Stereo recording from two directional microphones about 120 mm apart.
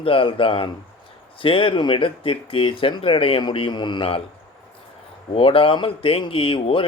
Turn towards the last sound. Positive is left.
turn(degrees=50)  # may be behind; listen again after turning